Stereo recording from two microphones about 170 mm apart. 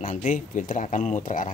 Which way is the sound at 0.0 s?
50° left (ahead or behind).